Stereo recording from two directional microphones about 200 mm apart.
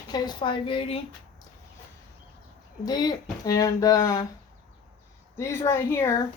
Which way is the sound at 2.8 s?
20° left (ahead or behind).